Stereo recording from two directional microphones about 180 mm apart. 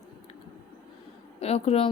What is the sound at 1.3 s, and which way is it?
Speech, 35° left (ahead or behind).